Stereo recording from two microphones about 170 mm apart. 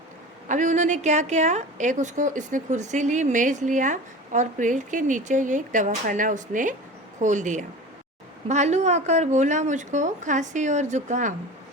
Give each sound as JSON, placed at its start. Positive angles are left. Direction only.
{"t": 0.4, "sound": "a woman's voice", "side_deg": -45}